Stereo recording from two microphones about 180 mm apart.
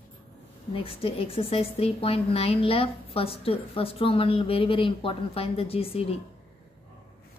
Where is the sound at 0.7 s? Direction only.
30° left (ahead or behind).